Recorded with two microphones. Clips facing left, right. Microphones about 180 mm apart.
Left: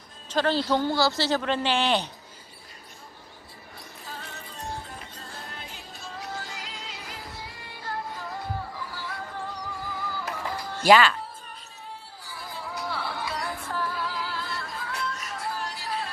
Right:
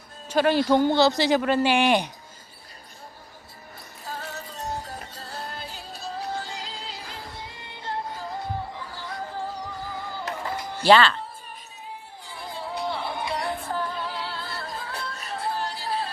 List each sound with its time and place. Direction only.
0.3 s speech: 10° right (ahead or behind)
4.0 s music: 40° right (ahead or behind); by 10.8 s 20° right (ahead or behind)
10.8 s speech: 10° left (ahead or behind)
12.2 s music: 25° right (ahead or behind)